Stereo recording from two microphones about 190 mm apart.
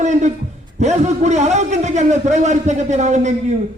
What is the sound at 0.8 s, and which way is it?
A man's voice, 35° right (ahead or behind).